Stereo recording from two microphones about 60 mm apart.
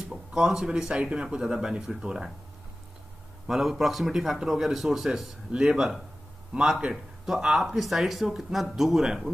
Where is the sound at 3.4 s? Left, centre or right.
Centre.